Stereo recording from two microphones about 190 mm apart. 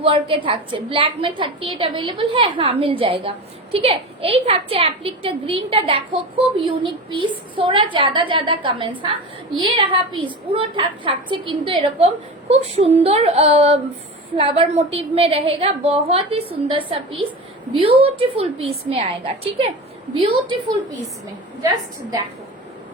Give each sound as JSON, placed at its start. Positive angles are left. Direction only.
{"t": 0.0, "sound": "a woman's voice", "side_deg": -30}